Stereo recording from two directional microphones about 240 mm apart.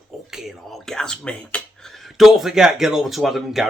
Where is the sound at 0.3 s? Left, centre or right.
Centre.